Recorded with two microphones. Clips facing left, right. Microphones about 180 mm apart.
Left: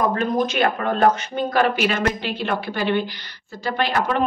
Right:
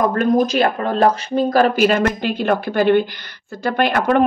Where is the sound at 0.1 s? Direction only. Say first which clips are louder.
Right 5 dB; 35° right (ahead or behind).